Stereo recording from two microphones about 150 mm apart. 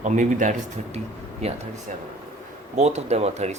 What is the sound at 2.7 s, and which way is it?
Speech, 50° right (ahead or behind).